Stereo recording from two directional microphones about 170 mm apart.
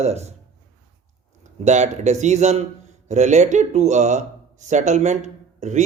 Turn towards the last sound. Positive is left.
turn(degrees=-45)  # may be behind; listen again after turning